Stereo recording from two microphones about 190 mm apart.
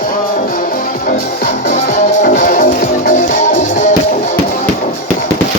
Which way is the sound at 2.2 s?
45° left (ahead or behind).